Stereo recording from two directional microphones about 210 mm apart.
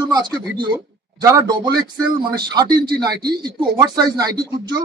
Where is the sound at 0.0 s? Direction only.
20° right (ahead or behind).